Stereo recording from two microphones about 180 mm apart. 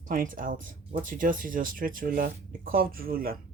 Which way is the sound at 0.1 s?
50° right (ahead or behind).